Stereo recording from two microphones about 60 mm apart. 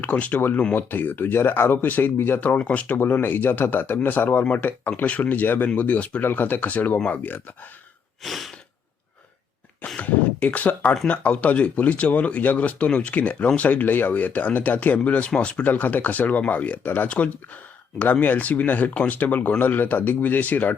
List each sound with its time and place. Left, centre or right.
0.0 s speech: left
2.5 s speech: left
8.2 s breathing: centre
10.0 s speech: left
15.6 s speech: left